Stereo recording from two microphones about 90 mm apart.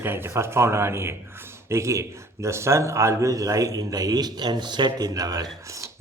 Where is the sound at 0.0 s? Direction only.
25° right (ahead or behind).